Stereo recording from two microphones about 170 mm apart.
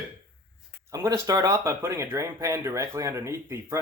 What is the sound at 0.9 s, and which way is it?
Speech, 20° right (ahead or behind).